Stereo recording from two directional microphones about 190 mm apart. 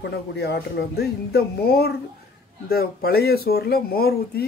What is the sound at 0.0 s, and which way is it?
Speech, 60° left (ahead or behind).